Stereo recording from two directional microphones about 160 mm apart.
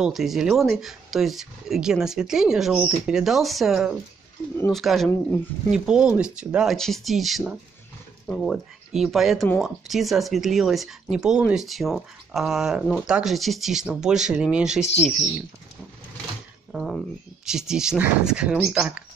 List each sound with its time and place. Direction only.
0.0 s speech: centre (ahead or behind)
16.7 s speech: centre (ahead or behind)